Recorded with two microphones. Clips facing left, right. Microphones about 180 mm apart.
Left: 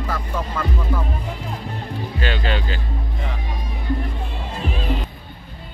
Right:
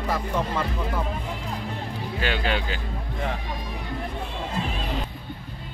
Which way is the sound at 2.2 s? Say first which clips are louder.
Left 1 dB; 10° right (ahead or behind).